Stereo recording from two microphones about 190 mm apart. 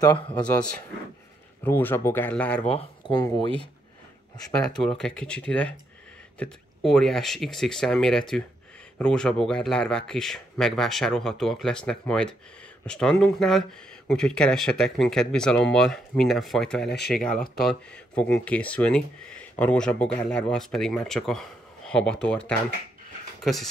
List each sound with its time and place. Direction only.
0.0 s speech: 10° left (ahead or behind)
1.6 s speech: 10° left (ahead or behind)
2.6 s speech: 30° left (ahead or behind)
4.5 s speech: 5° left (ahead or behind)